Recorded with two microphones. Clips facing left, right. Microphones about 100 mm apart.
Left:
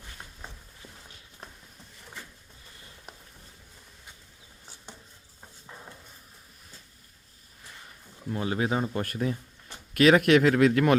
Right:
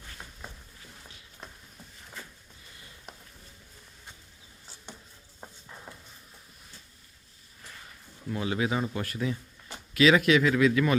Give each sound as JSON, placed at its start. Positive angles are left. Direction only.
{"t": 8.3, "sound": "speech", "side_deg": 35}
{"t": 9.9, "sound": "a man's voice", "side_deg": 55}